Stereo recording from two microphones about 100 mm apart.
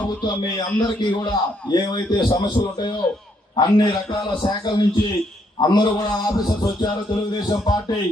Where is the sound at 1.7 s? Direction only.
45° left (ahead or behind).